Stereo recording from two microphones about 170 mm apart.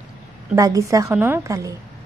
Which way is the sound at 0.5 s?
20° right (ahead or behind).